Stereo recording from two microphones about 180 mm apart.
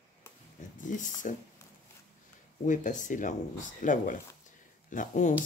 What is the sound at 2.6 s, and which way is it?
Speech, 45° left (ahead or behind).